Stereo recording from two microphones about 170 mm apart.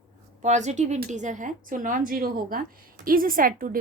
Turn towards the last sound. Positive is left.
turn(degrees=-55)  # may be behind; listen again after turning